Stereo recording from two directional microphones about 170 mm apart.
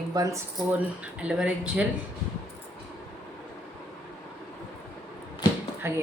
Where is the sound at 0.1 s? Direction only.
20° right (ahead or behind).